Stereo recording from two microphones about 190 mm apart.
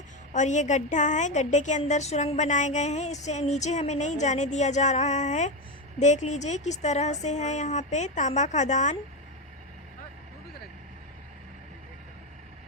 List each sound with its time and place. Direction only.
0.3 s a woman's voice: 40° left (ahead or behind)